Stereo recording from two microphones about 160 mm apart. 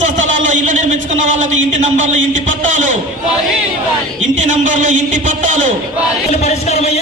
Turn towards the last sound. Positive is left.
turn(degrees=40)  # may be behind; listen again after turning